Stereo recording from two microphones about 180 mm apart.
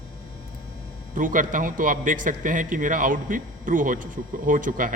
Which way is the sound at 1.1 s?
50° right (ahead or behind).